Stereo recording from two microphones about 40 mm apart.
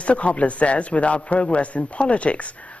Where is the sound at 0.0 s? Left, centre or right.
Left.